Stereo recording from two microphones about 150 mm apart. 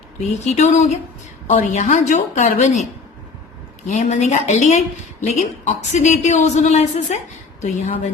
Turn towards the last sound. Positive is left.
turn(degrees=50)  # may be behind; listen again after turning